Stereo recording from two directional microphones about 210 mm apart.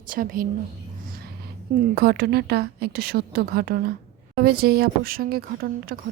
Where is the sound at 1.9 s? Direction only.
45° right (ahead or behind).